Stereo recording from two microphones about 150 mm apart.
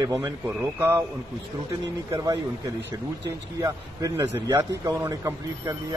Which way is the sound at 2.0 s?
25° right (ahead or behind).